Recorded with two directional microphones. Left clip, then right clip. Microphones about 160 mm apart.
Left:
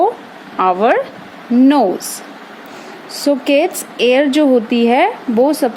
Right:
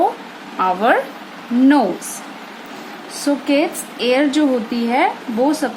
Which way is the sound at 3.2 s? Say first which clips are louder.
Left 4 dB; 55° left (ahead or behind).